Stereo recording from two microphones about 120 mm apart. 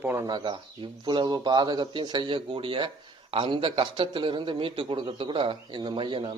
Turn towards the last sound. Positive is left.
turn(degrees=-45)  # may be behind; listen again after turning